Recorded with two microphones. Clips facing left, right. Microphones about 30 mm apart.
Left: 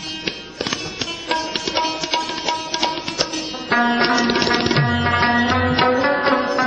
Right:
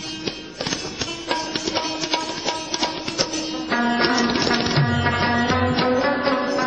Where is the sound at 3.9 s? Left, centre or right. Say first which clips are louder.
Left 2 dB; left.